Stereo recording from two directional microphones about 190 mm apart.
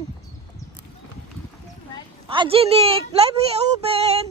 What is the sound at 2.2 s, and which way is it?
A woman's voice, 30° right (ahead or behind).